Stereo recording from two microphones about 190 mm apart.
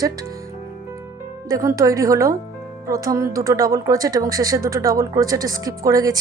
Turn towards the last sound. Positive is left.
turn(degrees=-20)  # may be behind; listen again after turning